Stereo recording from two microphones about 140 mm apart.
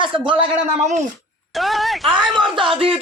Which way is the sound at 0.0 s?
35° right (ahead or behind).